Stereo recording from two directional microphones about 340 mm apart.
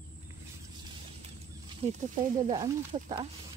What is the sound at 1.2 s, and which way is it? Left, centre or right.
Speech, centre.